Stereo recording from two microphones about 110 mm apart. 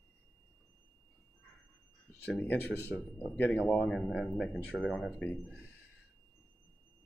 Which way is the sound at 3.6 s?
5° left (ahead or behind).